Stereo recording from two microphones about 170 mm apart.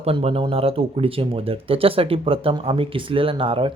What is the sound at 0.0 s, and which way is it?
A man's voice, 35° right (ahead or behind).